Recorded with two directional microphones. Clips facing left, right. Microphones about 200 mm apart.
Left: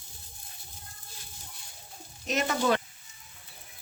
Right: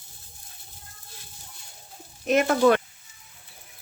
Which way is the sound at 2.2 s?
55° right (ahead or behind).